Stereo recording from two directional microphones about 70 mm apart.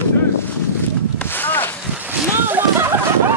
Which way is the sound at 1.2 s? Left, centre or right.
Left.